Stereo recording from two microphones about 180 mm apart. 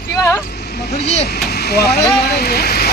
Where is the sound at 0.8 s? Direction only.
65° left (ahead or behind).